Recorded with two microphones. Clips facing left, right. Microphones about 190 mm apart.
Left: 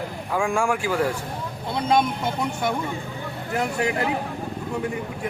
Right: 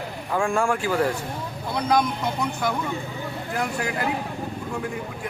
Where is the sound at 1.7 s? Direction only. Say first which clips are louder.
Left 1 dB; 25° left (ahead or behind).